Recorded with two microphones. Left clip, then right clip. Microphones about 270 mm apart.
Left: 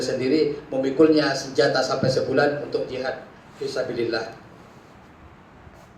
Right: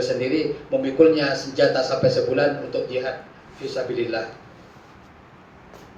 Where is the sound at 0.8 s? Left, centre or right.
Centre.